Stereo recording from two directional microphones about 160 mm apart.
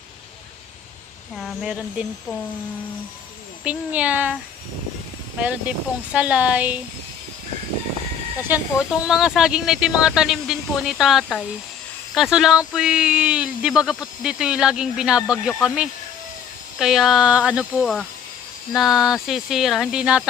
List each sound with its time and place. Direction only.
1.4 s speech: centre (ahead or behind)
3.6 s speech: 10° right (ahead or behind)
5.4 s speech: 10° right (ahead or behind)
8.4 s speech: 10° right (ahead or behind)